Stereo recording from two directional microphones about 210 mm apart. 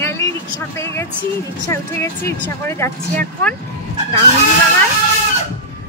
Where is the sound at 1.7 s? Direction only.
15° left (ahead or behind).